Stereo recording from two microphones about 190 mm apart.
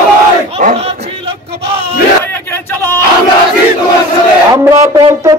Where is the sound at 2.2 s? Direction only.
10° left (ahead or behind).